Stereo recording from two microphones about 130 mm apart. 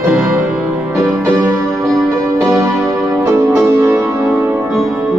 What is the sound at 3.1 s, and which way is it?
Music, 20° right (ahead or behind).